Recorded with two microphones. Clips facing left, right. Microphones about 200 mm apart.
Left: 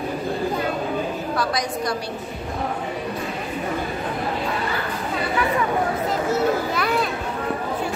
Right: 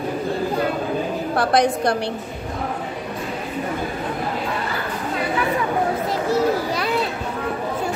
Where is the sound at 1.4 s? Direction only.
60° right (ahead or behind).